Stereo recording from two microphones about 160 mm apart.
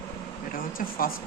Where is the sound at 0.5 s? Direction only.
60° left (ahead or behind).